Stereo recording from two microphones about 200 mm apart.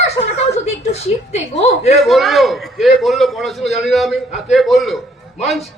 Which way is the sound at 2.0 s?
Centre (ahead or behind).